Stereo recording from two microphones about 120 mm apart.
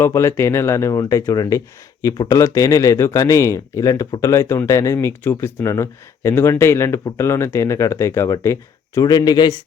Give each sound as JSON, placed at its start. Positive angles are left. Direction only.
{"t": 0.0, "sound": "speech", "side_deg": 25}
{"t": 9.0, "sound": "speech", "side_deg": 35}